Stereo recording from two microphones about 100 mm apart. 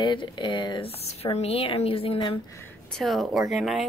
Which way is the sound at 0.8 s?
90° left.